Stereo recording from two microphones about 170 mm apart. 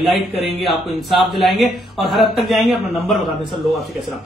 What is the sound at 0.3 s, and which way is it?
Speech, 35° left (ahead or behind).